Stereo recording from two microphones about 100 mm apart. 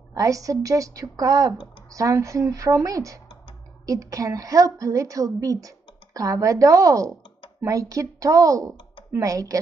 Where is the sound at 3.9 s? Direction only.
35° right (ahead or behind).